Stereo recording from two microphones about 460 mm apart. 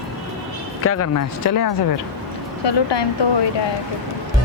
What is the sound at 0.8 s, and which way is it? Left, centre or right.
Speech, left.